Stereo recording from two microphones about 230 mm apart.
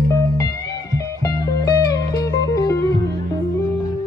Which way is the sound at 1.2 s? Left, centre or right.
Centre.